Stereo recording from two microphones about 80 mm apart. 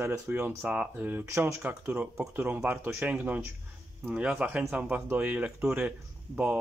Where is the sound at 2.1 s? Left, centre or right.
Right.